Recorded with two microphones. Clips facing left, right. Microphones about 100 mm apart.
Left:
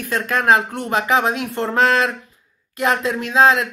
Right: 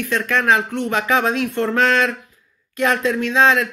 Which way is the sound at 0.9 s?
30° left (ahead or behind).